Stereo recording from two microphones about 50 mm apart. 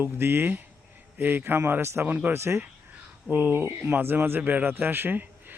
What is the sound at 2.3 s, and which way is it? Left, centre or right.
Speech, right.